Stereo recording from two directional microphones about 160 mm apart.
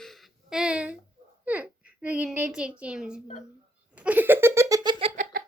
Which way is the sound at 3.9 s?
10° right (ahead or behind).